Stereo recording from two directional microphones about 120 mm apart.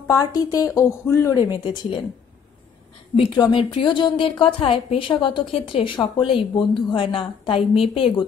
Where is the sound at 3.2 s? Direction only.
45° left (ahead or behind).